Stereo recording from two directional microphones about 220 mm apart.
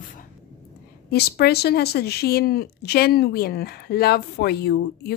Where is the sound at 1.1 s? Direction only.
45° left (ahead or behind).